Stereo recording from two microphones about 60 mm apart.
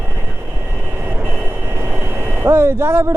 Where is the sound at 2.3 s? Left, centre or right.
Right.